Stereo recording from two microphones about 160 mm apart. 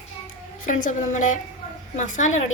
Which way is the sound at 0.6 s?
55° left (ahead or behind).